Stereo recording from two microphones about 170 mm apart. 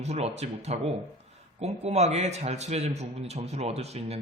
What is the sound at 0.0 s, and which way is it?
Speech, 40° right (ahead or behind).